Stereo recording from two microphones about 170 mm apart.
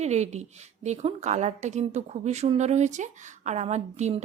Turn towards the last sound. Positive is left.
turn(degrees=-40)  # may be behind; listen again after turning